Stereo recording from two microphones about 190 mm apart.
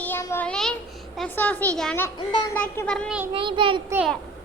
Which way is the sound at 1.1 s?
5° left (ahead or behind).